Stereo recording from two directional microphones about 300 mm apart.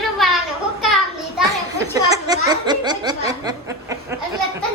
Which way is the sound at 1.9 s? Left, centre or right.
Centre.